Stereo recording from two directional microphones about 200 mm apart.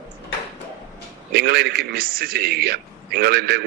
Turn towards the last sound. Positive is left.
turn(degrees=-50)  # may be behind; listen again after turning